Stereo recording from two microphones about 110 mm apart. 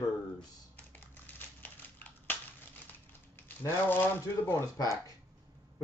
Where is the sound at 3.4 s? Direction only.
20° left (ahead or behind).